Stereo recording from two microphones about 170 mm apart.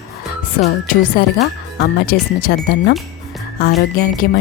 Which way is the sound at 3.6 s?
65° left (ahead or behind).